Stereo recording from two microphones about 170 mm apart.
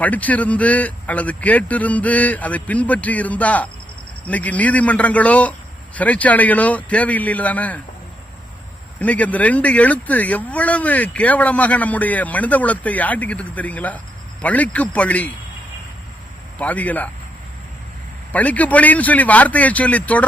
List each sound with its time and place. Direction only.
0.0 s speech: 10° left (ahead or behind)
9.0 s speech: 10° left (ahead or behind)
16.6 s speech: 10° left (ahead or behind)
18.3 s speech: 10° left (ahead or behind)